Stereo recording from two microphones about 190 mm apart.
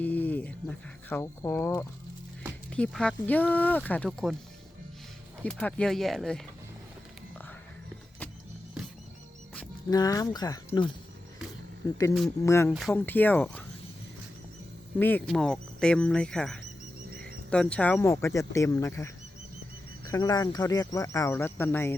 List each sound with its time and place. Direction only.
0.0 s speech: 10° left (ahead or behind)
5.4 s speech: 5° left (ahead or behind)
9.9 s speech: 20° left (ahead or behind)
12.4 s speech: 15° left (ahead or behind)
14.9 s speech: 10° left (ahead or behind)